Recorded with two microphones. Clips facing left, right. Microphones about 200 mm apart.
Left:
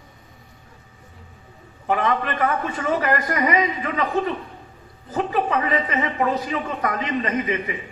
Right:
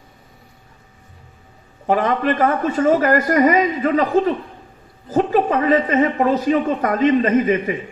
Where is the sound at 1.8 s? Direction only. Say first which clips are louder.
Right 5 dB; 40° right (ahead or behind).